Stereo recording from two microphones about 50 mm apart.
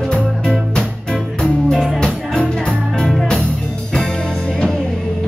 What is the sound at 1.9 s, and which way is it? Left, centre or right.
Music, centre.